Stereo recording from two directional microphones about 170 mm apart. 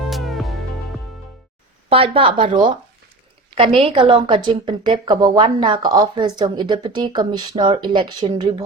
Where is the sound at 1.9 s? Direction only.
30° right (ahead or behind).